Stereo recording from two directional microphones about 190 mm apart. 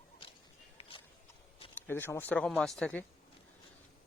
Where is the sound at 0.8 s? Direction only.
25° left (ahead or behind).